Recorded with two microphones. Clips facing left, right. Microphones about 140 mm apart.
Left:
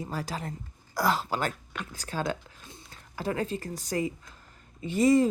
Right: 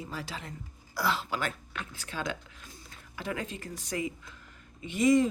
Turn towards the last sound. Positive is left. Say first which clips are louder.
# left 2 dB
turn(degrees=35)  # may be behind; listen again after turning